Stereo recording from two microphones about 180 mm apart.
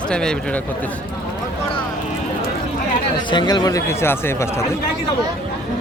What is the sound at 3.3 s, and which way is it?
Speech, 25° left (ahead or behind).